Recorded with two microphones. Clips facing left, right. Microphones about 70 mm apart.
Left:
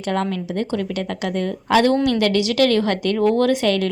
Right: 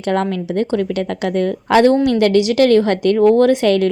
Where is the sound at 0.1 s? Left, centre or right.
Right.